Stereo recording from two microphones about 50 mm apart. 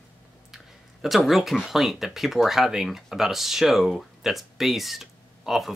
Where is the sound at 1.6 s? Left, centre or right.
Centre.